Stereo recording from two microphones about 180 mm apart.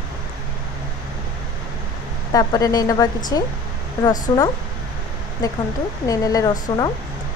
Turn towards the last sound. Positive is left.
turn(degrees=20)  # may be behind; listen again after turning